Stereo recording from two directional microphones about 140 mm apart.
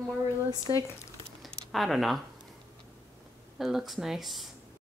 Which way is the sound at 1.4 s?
Centre (ahead or behind).